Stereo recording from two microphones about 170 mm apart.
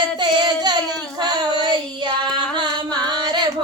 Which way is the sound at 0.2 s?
25° right (ahead or behind).